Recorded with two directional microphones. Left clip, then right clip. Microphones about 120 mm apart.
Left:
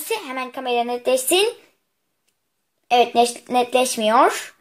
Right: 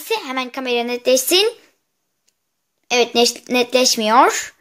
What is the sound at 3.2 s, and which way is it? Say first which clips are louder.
Speech: right 2 dB; 45° right (ahead or behind).